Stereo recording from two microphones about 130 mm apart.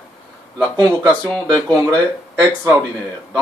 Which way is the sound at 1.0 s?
10° left (ahead or behind).